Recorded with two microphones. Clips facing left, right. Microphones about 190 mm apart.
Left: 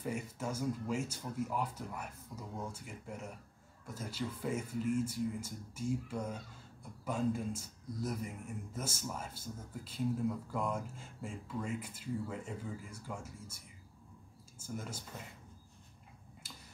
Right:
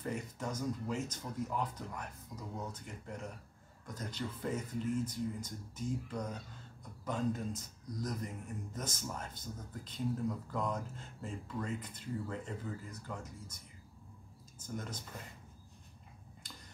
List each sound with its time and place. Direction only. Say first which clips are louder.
0.0 s speech: left 1 dB; 10° left (ahead or behind)
14.6 s speech: even; 10° left (ahead or behind)
16.4 s finger snapping: right 1 dB; 5° left (ahead or behind)